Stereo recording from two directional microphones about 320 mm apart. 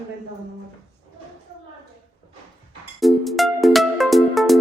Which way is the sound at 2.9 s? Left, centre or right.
Centre.